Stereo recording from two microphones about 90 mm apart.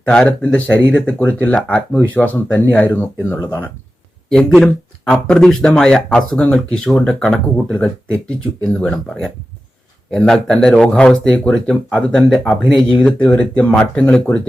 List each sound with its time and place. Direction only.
0.1 s speech: 10° left (ahead or behind)
4.3 s speech: 5° left (ahead or behind)
13.0 s speech: 15° left (ahead or behind)